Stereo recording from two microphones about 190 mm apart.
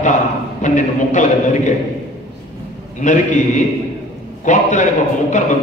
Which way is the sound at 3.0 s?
40° left (ahead or behind).